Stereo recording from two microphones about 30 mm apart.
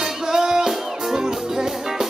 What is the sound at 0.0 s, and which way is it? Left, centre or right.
Music, centre.